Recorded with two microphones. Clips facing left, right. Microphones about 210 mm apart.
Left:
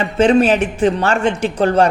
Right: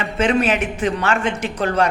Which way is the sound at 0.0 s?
30° left (ahead or behind).